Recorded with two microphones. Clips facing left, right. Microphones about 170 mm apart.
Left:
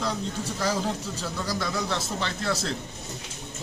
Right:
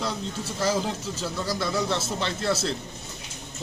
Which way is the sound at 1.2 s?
5° right (ahead or behind).